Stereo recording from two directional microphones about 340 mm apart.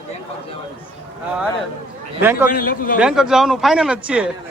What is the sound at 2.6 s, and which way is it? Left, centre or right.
Speech, left.